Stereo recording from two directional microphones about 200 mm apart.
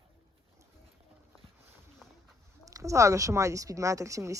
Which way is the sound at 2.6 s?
15° right (ahead or behind).